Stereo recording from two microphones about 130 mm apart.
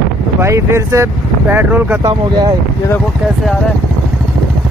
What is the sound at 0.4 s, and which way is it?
Speech, 20° right (ahead or behind).